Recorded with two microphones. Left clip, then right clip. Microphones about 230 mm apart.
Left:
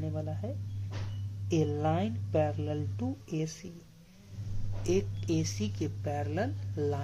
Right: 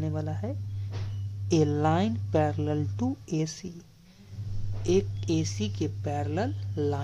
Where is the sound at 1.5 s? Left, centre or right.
Right.